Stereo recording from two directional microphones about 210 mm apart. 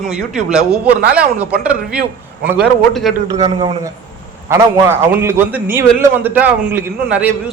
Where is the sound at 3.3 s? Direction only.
30° right (ahead or behind).